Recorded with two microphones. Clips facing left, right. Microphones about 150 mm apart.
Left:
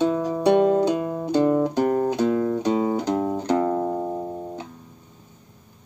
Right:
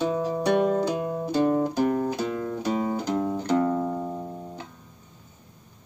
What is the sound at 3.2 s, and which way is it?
Music, 35° left (ahead or behind).